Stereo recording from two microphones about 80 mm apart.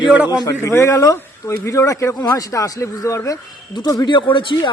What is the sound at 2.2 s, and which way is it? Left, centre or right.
Speech, left.